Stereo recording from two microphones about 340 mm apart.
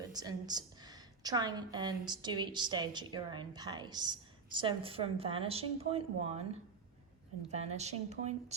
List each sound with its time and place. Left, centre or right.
0.1 s a woman's voice: centre
7.5 s speech: centre